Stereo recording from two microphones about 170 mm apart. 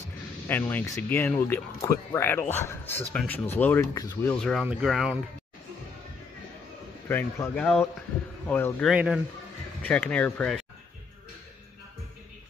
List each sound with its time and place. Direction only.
0.5 s speech: 10° left (ahead or behind)
3.9 s speech: 20° left (ahead or behind)
4.3 s speech: 5° left (ahead or behind)
7.1 s speech: 15° left (ahead or behind)
8.8 s speech: 5° right (ahead or behind)
9.8 s speech: 10° left (ahead or behind)